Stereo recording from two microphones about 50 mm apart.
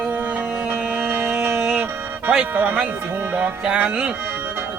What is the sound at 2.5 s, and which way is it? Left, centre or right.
Speech, right.